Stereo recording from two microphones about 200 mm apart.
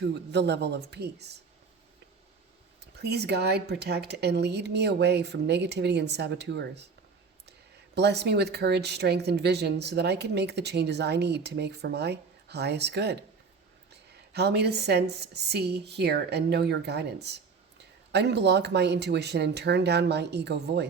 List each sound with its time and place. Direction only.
0.0 s speech: 60° right (ahead or behind)
2.8 s speech: 55° right (ahead or behind)
7.9 s speech: 55° right (ahead or behind)